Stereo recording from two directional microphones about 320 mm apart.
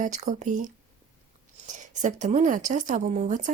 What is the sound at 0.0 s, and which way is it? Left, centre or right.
Speech, right.